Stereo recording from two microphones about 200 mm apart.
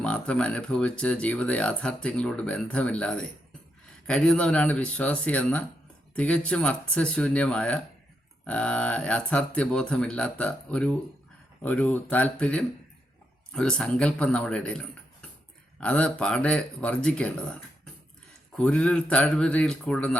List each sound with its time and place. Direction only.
0.0 s speech: 5° left (ahead or behind)